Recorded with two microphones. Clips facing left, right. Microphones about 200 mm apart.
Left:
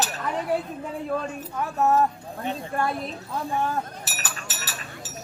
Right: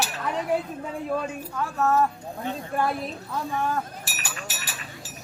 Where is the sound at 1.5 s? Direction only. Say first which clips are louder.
Left 2 dB; 20° left (ahead or behind).